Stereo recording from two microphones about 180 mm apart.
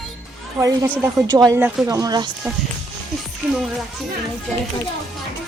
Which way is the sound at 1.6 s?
10° right (ahead or behind).